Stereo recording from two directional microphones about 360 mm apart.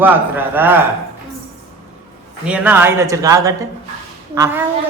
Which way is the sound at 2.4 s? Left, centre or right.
Centre.